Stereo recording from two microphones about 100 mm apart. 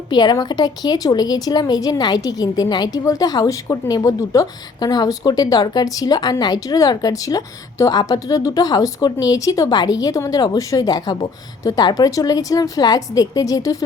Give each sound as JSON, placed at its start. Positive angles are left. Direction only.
{"t": 0.1, "sound": "a woman's voice", "side_deg": 45}